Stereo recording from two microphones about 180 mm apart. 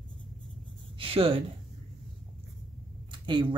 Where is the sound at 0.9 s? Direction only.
30° right (ahead or behind).